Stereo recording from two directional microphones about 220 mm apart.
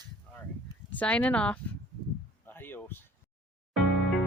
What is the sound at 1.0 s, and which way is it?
Speech, 5° left (ahead or behind).